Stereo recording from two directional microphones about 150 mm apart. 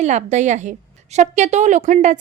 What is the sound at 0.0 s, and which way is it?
A woman's voice, 50° right (ahead or behind).